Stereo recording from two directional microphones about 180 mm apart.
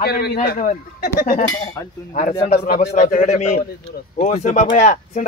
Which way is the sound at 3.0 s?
45° left (ahead or behind).